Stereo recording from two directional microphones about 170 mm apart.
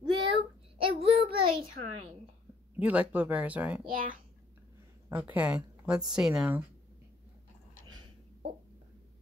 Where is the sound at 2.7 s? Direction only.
10° right (ahead or behind).